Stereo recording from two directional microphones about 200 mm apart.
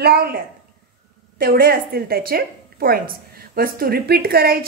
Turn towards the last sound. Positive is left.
turn(degrees=-50)  # may be behind; listen again after turning